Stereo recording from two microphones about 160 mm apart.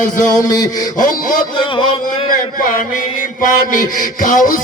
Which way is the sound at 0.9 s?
55° left (ahead or behind).